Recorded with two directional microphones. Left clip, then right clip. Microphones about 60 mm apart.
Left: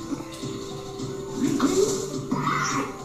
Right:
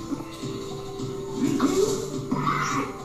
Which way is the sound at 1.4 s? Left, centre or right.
Centre.